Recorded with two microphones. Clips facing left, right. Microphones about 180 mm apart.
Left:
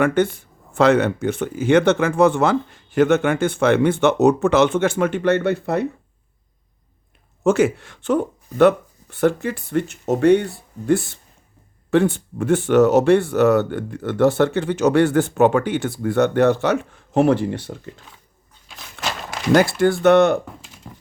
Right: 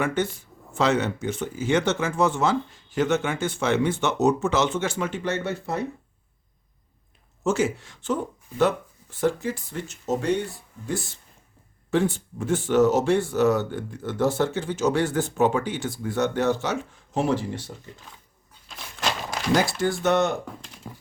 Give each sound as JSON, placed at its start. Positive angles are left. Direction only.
{"t": 0.0, "sound": "speech", "side_deg": 60}
{"t": 7.4, "sound": "speech", "side_deg": 60}
{"t": 18.7, "sound": "a sound", "side_deg": 0}
{"t": 19.8, "sound": "speech", "side_deg": 65}
{"t": 20.4, "sound": "typing", "side_deg": 0}